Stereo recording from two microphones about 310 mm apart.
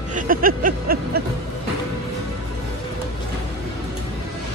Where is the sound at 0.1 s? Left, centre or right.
Right.